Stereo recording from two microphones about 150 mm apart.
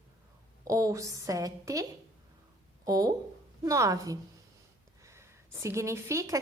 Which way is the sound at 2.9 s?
25° right (ahead or behind).